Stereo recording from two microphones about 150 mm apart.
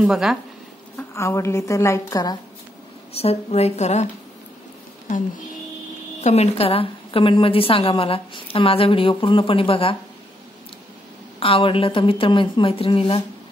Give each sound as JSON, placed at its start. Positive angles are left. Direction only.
{"t": 0.0, "sound": "speech", "side_deg": 0}
{"t": 0.9, "sound": "speech", "side_deg": 20}
{"t": 3.2, "sound": "speech", "side_deg": 45}
{"t": 6.2, "sound": "a woman's voice", "side_deg": 45}
{"t": 11.3, "sound": "a woman's voice", "side_deg": 35}